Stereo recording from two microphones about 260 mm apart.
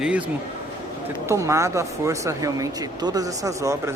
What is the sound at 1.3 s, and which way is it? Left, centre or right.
A woman's voice, centre.